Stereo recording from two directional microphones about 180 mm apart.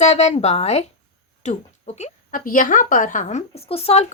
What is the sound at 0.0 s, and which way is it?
Speech, 40° left (ahead or behind).